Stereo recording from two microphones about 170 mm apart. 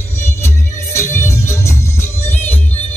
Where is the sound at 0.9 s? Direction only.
15° left (ahead or behind).